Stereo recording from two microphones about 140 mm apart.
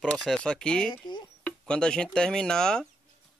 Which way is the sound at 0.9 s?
35° left (ahead or behind).